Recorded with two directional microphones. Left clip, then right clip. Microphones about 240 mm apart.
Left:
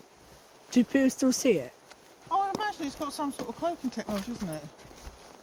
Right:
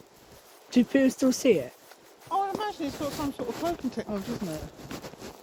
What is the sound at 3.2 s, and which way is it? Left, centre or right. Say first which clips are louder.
Speech: left 1 dB; left.